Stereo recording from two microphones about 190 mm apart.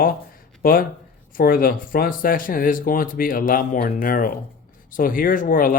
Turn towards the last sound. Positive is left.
turn(degrees=45)  # may be behind; listen again after turning